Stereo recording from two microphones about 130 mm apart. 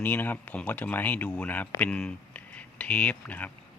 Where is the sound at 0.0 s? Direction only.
15° left (ahead or behind).